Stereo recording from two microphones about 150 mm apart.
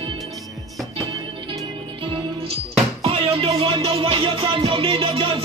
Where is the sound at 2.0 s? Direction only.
35° right (ahead or behind).